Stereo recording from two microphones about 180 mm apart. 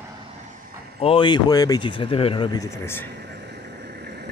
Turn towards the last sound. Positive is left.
turn(degrees=-65)  # may be behind; listen again after turning